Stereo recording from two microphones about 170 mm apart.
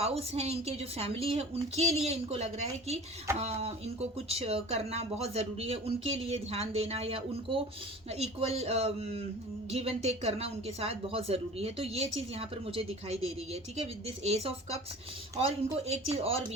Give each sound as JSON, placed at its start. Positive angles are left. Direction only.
{"t": 0.0, "sound": "speech", "side_deg": -35}